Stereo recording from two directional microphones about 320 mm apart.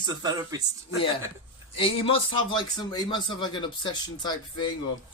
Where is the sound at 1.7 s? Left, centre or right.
Centre.